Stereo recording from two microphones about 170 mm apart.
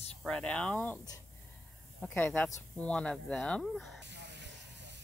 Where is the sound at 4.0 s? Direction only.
90° right.